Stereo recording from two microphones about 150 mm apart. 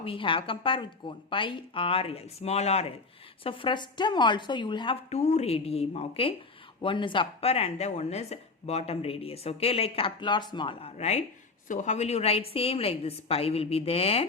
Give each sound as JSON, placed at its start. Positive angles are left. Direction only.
{"t": 0.0, "sound": "speech", "side_deg": 35}
{"t": 5.0, "sound": "a woman's voice", "side_deg": 50}